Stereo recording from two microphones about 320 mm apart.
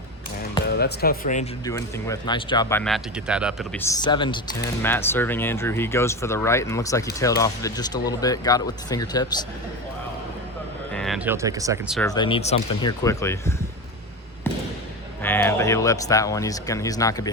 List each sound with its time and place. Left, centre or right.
0.7 s speech: left
1.6 s speech: centre
10.9 s speech: centre
11.9 s speech: centre
15.2 s speech: centre